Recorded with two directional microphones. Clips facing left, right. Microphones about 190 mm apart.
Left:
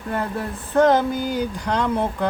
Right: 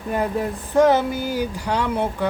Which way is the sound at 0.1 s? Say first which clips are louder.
Right 3 dB; 15° right (ahead or behind).